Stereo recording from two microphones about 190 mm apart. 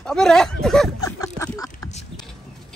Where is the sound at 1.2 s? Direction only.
15° left (ahead or behind).